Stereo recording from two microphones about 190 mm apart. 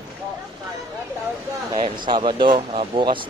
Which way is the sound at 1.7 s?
25° right (ahead or behind).